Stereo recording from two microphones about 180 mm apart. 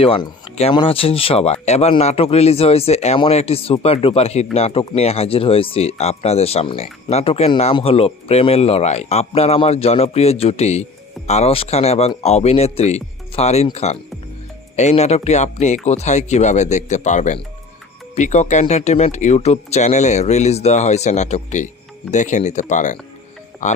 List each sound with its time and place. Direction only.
0.0 s speech: 30° left (ahead or behind)